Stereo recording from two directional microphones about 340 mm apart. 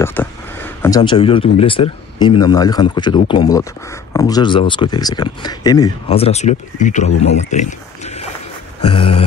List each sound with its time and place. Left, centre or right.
0.0 s speech: centre
8.9 s speech: centre